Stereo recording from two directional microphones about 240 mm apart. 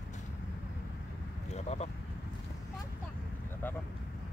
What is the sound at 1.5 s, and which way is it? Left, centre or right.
Speech, left.